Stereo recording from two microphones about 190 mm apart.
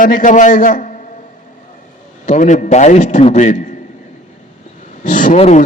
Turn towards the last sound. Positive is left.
turn(degrees=35)  # may be behind; listen again after turning